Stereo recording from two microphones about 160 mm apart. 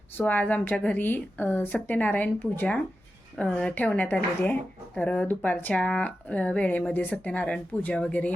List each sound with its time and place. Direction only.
0.2 s speech: 10° left (ahead or behind)